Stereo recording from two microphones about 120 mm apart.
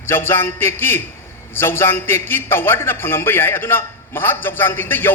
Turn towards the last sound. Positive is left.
turn(degrees=20)  # may be behind; listen again after turning